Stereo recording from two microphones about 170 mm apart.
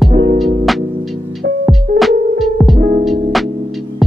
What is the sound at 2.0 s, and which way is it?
Music, centre (ahead or behind).